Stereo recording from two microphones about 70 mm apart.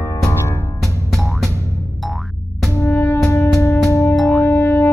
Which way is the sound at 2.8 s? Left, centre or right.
Left.